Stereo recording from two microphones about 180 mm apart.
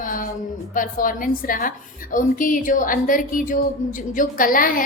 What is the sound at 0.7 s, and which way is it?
A woman's voice, 50° left (ahead or behind).